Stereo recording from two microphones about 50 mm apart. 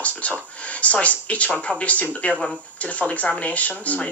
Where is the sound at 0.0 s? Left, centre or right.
Left.